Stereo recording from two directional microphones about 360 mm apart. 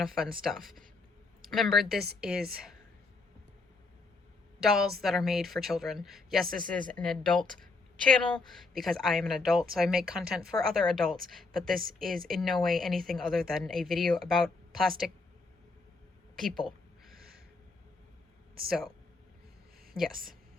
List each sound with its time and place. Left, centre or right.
0.2 s speech: centre
4.6 s speech: centre
11.7 s a woman's voice: right
11.9 s speech: centre
18.7 s speech: centre
19.9 s speech: centre